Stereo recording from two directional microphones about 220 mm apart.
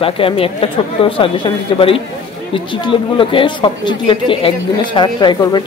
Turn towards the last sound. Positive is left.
turn(degrees=20)  # may be behind; listen again after turning